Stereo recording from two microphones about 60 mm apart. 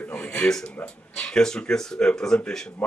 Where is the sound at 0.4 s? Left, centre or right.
Centre.